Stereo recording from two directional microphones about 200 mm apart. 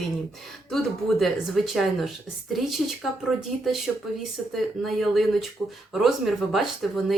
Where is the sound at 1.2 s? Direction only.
Centre (ahead or behind).